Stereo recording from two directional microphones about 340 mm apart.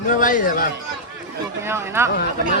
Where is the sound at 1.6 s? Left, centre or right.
Centre.